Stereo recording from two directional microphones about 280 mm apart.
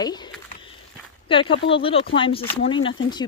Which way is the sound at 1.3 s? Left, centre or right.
Centre.